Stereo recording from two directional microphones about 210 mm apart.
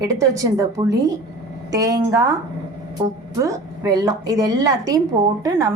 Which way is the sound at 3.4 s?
15° right (ahead or behind).